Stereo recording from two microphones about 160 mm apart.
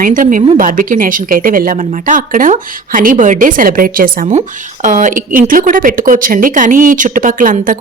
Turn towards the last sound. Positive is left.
turn(degrees=-55)  # may be behind; listen again after turning